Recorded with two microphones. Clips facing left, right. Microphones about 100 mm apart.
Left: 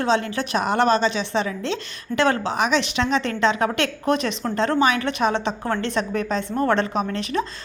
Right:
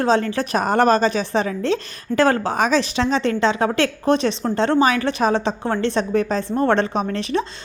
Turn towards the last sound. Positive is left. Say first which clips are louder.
# right 2 dB
turn(degrees=-35)  # may be behind; listen again after turning